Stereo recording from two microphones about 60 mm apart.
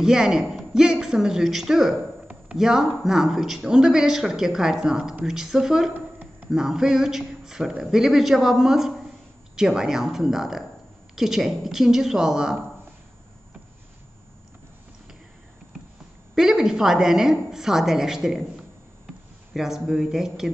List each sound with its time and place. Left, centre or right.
0.0 s speech: centre
5.9 s a sound: right
6.5 s speech: centre
16.3 s speech: centre
19.5 s speech: centre